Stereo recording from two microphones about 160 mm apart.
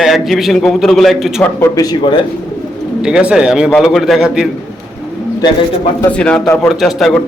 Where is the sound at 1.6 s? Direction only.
25° left (ahead or behind).